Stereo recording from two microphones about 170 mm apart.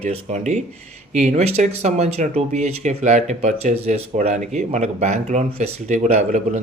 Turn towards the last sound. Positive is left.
turn(degrees=-40)  # may be behind; listen again after turning